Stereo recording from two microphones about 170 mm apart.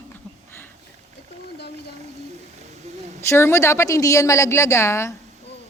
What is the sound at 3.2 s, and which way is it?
A woman's voice, 15° left (ahead or behind).